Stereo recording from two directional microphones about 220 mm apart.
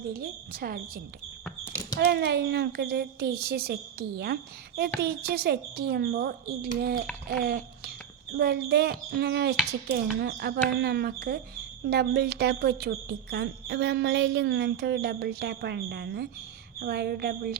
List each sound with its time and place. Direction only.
0.1 s a woman's voice: 45° right (ahead or behind)